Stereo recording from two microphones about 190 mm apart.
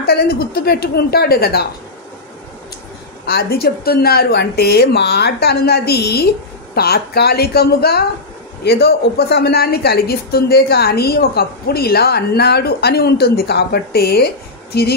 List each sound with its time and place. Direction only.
0.0 s a woman's voice: 55° left (ahead or behind)
3.3 s a woman's voice: 55° left (ahead or behind)